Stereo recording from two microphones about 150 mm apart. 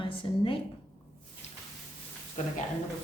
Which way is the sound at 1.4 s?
45° left (ahead or behind).